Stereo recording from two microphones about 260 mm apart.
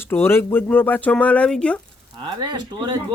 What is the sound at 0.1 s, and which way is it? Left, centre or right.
Speech, centre.